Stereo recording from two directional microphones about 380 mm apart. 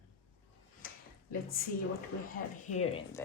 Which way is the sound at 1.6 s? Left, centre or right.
Left.